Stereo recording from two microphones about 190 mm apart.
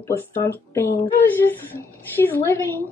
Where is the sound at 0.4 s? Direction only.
15° left (ahead or behind).